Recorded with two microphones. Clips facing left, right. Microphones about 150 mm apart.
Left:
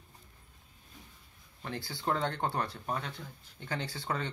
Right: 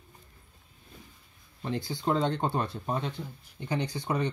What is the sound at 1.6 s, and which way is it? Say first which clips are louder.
Speech: right 7 dB; 20° right (ahead or behind).